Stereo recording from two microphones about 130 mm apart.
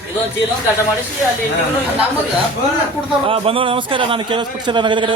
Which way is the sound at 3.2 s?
45° right (ahead or behind).